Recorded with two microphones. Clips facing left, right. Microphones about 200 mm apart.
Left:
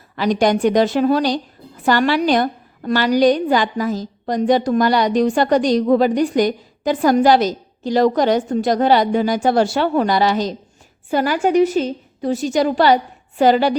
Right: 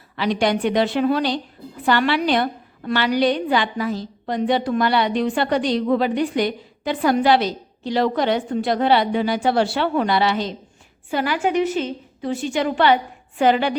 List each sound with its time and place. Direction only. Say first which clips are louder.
0.2 s a woman's voice: left 4 dB; 45° left (ahead or behind)